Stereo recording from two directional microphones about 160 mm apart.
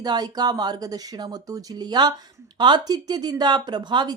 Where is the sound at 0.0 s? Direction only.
25° right (ahead or behind).